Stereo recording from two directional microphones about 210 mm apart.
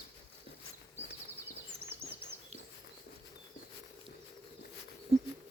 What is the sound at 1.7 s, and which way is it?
Bird vocalization, 30° right (ahead or behind).